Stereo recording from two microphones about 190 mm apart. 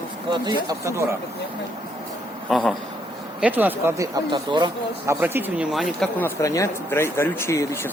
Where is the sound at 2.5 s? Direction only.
Centre (ahead or behind).